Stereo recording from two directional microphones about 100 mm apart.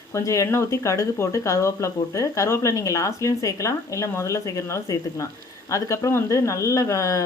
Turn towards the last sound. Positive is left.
turn(degrees=30)  # may be behind; listen again after turning